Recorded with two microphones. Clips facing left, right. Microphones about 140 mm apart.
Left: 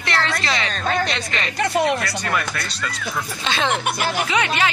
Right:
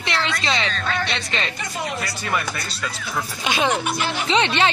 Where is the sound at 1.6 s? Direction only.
70° left (ahead or behind).